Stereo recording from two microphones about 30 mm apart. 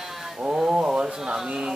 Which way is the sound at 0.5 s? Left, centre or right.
Right.